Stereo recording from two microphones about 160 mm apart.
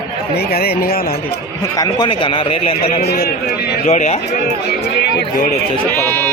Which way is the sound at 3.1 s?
75° left (ahead or behind).